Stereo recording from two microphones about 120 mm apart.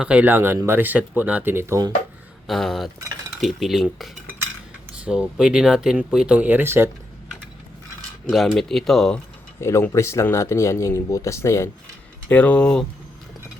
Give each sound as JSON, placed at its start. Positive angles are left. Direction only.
{"t": 0.0, "sound": "speech", "side_deg": -10}
{"t": 2.5, "sound": "speech", "side_deg": 0}
{"t": 8.3, "sound": "speech", "side_deg": 0}
{"t": 9.6, "sound": "speech", "side_deg": 20}
{"t": 12.3, "sound": "speech", "side_deg": 10}